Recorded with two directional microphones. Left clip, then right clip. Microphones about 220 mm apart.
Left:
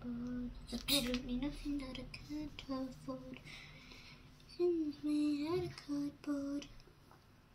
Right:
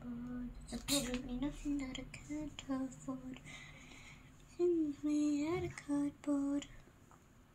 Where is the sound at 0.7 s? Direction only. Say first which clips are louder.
Left 2 dB; 35° right (ahead or behind).